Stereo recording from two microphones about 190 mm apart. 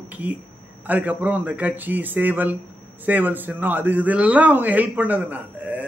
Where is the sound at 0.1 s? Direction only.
10° right (ahead or behind).